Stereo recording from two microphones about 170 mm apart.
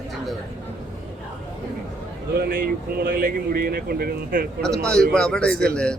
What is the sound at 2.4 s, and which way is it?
Speech, 60° right (ahead or behind).